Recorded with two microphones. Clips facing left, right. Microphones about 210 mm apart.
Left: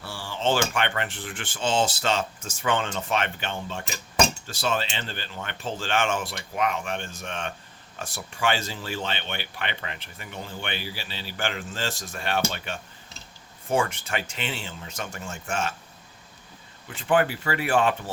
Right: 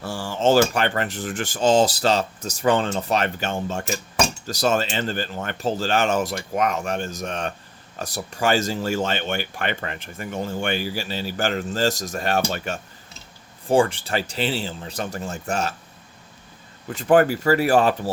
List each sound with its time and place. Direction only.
0.0 s speech: 45° right (ahead or behind)
13.7 s speech: 30° right (ahead or behind)
16.9 s speech: 40° right (ahead or behind)